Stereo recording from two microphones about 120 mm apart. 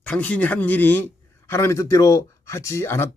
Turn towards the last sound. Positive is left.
turn(degrees=20)  # may be behind; listen again after turning